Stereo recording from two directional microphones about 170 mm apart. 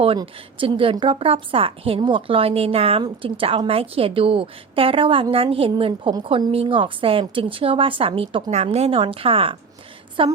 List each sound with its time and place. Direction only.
0.0 s a woman's voice: 30° right (ahead or behind)